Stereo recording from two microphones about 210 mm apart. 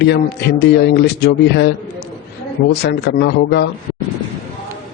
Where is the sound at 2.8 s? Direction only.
50° left (ahead or behind).